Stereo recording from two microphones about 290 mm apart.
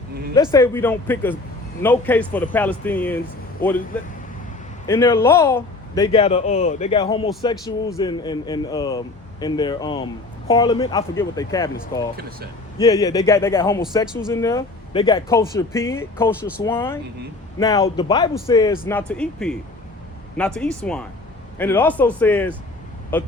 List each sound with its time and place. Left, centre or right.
0.3 s speech: centre
4.9 s speech: centre